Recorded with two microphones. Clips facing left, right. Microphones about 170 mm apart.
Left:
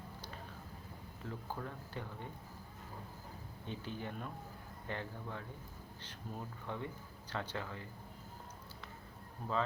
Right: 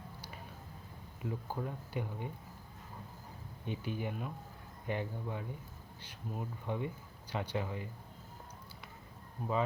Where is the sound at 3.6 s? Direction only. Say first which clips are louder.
Right 5 dB; 15° right (ahead or behind).